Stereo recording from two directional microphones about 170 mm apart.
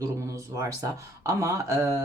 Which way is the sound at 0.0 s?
20° right (ahead or behind).